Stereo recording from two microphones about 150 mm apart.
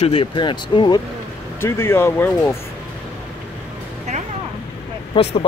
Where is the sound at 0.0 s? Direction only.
40° left (ahead or behind).